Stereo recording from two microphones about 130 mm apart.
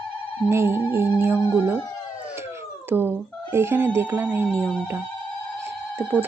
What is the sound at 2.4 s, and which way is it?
A woman's voice, 20° right (ahead or behind).